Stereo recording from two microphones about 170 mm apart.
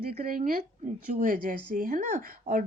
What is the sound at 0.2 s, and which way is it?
A woman's voice, 55° right (ahead or behind).